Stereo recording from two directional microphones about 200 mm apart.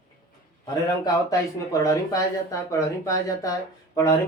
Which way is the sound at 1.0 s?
20° left (ahead or behind).